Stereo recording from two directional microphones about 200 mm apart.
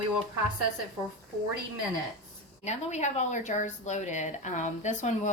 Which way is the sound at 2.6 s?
35° left (ahead or behind).